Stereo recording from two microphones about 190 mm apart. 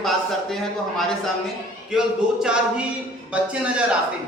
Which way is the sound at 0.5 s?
Centre (ahead or behind).